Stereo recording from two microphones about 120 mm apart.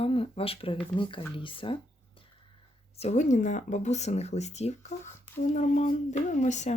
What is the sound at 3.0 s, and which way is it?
Speech, 80° left.